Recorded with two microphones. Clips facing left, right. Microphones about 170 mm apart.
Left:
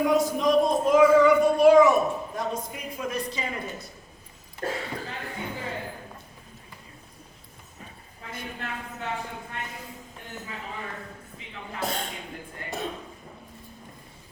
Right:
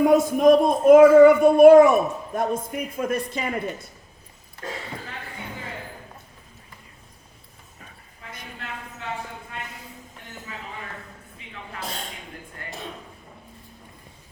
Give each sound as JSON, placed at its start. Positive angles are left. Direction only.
{"t": 0.0, "sound": "child singing", "side_deg": -50}